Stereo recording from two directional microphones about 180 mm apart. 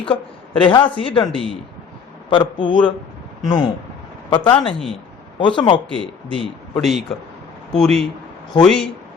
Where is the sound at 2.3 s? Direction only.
25° left (ahead or behind).